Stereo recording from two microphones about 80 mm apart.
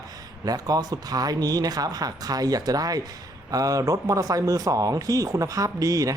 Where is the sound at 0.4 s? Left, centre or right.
Right.